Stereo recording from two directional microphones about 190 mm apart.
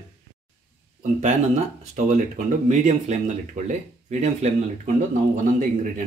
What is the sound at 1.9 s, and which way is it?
Speech, 40° right (ahead or behind).